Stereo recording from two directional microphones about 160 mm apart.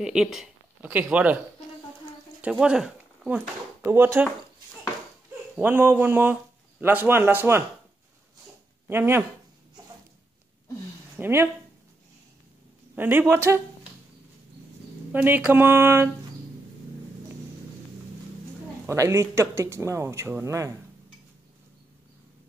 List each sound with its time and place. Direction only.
0.0 s speech: 5° right (ahead or behind)
2.5 s speech: 5° right (ahead or behind)
5.6 s speech: 10° right (ahead or behind)
8.8 s speech: 15° right (ahead or behind)
11.1 s speech: 15° right (ahead or behind)
12.9 s speech: 15° right (ahead or behind)
15.1 s speech: 10° right (ahead or behind)
18.9 s speech: 15° right (ahead or behind)